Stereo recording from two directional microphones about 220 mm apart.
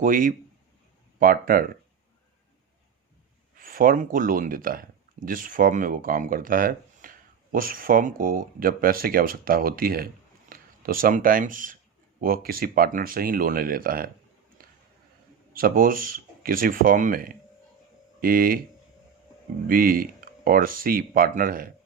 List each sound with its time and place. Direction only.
0.0 s speech: 40° right (ahead or behind)
3.6 s speech: 40° right (ahead or behind)
15.5 s speech: 40° right (ahead or behind)
19.6 s speech: 40° right (ahead or behind)